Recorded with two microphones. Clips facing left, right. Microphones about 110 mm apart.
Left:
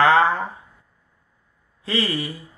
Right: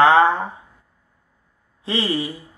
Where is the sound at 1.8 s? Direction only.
25° right (ahead or behind).